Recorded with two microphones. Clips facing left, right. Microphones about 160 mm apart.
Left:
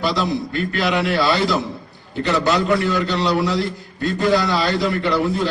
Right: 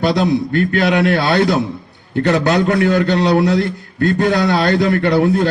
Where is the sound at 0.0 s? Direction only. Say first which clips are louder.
Right 6 dB; 55° right (ahead or behind).